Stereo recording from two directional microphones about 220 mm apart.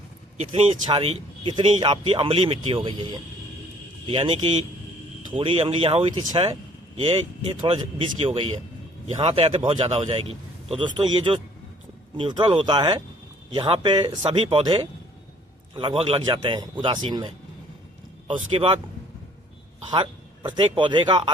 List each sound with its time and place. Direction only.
0.3 s speech: 25° right (ahead or behind)
19.9 s a man's voice: 20° right (ahead or behind)